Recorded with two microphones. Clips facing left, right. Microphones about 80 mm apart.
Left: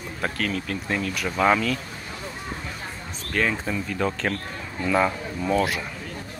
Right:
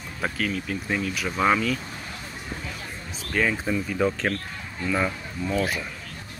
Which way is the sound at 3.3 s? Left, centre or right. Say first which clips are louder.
Right 1 dB; centre.